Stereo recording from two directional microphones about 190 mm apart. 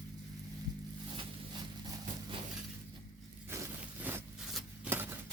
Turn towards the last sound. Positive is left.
turn(degrees=-10)  # may be behind; listen again after turning